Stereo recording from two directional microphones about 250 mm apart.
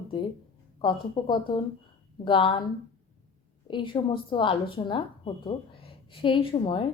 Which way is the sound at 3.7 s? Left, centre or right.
Centre.